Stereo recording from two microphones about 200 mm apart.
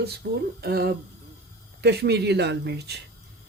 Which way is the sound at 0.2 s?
55° right (ahead or behind).